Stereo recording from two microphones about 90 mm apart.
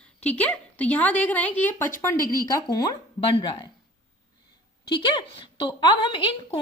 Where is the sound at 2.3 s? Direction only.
40° left (ahead or behind).